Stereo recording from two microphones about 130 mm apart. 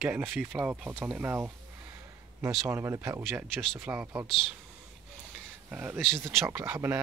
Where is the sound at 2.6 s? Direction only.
20° right (ahead or behind).